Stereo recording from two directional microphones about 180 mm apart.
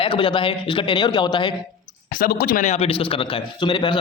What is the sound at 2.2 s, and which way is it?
A man's voice, 55° left (ahead or behind).